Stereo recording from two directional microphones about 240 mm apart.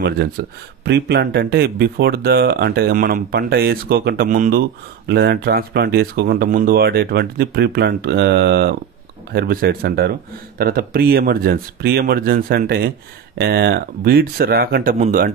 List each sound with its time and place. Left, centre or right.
0.0 s speech: right